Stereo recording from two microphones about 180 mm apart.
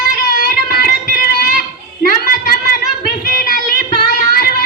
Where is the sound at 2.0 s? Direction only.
55° left (ahead or behind).